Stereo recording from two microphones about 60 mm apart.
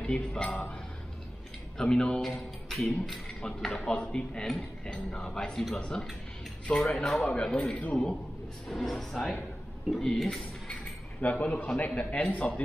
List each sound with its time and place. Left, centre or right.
0.0 s speech: centre
1.8 s a man's voice: centre
5.8 s a man's voice: centre
6.8 s speech: centre
7.3 s a man's voice: centre
8.6 s a man's voice: centre
11.1 s speech: left